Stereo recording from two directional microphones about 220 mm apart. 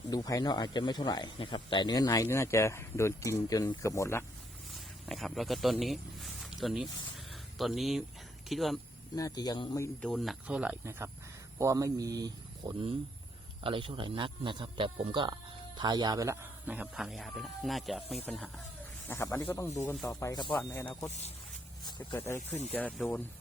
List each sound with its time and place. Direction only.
0.1 s speech: 15° left (ahead or behind)
5.0 s speech: centre (ahead or behind)
9.1 s speech: 15° left (ahead or behind)
10.1 s speech: centre (ahead or behind)
21.8 s speech: 20° left (ahead or behind)